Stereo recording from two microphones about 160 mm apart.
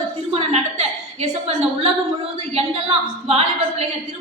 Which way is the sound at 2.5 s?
40° right (ahead or behind).